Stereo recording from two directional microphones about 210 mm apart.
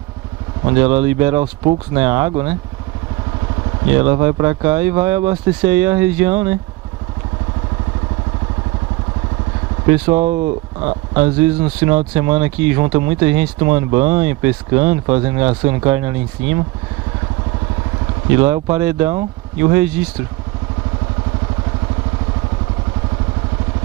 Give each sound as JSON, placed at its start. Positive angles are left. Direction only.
{"t": 0.7, "sound": "speech", "side_deg": -15}
{"t": 1.4, "sound": "speech", "side_deg": -30}
{"t": 2.0, "sound": "speech", "side_deg": -15}
{"t": 3.9, "sound": "speech", "side_deg": -20}
{"t": 10.1, "sound": "speech", "side_deg": -30}
{"t": 12.1, "sound": "speech", "side_deg": -10}
{"t": 13.6, "sound": "speech", "side_deg": -25}
{"t": 18.3, "sound": "speech", "side_deg": -15}